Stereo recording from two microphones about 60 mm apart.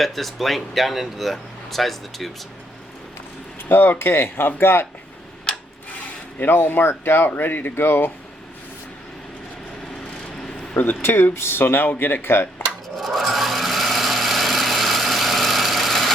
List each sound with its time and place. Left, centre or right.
0.0 s speech: centre
3.6 s speech: left
6.4 s speech: left
10.8 s speech: left
13.0 s blender: centre